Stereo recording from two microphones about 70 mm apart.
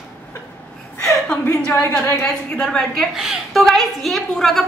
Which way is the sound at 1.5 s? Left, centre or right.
Left.